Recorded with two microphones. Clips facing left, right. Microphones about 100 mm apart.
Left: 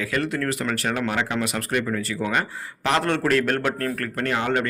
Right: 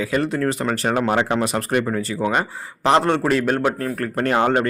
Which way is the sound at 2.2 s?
25° right (ahead or behind).